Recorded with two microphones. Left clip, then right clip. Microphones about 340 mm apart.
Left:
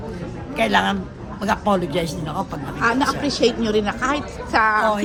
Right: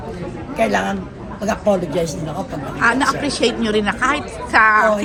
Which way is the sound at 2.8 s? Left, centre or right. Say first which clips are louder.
Right 3 dB; right.